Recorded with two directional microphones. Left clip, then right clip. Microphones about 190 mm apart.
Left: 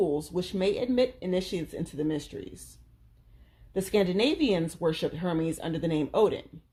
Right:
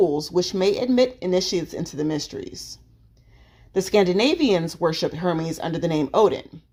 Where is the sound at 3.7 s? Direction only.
30° right (ahead or behind).